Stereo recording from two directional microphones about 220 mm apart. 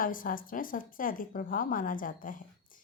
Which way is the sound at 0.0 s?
40° left (ahead or behind).